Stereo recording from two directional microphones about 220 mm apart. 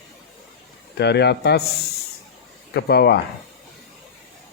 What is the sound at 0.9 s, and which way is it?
Speech, 50° left (ahead or behind).